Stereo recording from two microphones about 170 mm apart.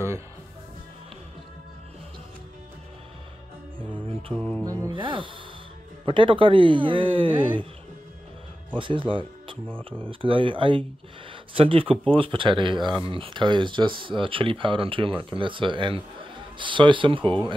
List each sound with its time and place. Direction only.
3.9 s mantra: 5° left (ahead or behind)
4.8 s speech: 30° right (ahead or behind)
8.7 s speech: 30° right (ahead or behind)